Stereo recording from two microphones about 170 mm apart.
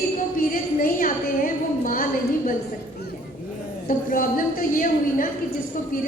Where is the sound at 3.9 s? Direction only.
55° left (ahead or behind).